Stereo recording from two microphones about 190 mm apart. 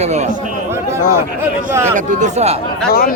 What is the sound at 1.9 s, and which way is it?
Speech, 35° right (ahead or behind).